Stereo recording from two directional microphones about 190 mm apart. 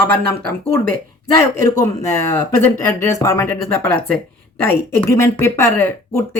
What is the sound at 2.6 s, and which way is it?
Speech, 15° left (ahead or behind).